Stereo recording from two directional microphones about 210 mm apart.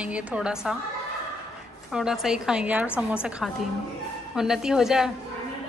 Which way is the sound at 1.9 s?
Centre (ahead or behind).